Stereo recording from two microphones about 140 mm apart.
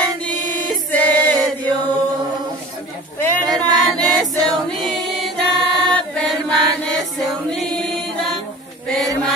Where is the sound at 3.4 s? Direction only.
30° right (ahead or behind).